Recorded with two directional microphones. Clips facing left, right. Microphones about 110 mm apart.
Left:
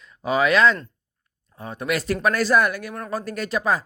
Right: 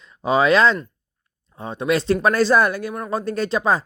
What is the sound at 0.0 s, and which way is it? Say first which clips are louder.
Speech: right 3 dB; 30° right (ahead or behind).